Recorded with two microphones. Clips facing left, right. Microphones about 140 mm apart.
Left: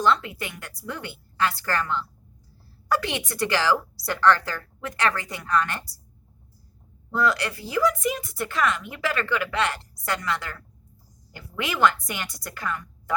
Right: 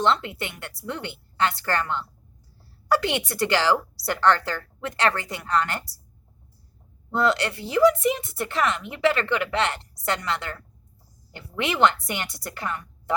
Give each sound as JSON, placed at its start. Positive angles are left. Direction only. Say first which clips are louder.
{"t": 0.0, "sound": "speech", "louder": "even", "side_deg": -25}
{"t": 7.1, "sound": "speech", "louder": "right 2 dB", "side_deg": -25}